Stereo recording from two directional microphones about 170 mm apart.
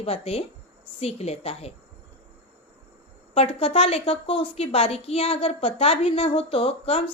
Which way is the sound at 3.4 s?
35° left (ahead or behind).